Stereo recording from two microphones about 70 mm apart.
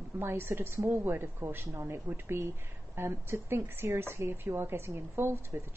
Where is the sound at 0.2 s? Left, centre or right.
Right.